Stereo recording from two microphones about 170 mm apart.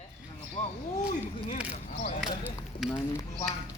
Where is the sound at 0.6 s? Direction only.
30° left (ahead or behind).